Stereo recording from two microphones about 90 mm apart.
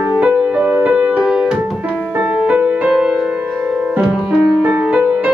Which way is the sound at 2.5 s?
15° right (ahead or behind).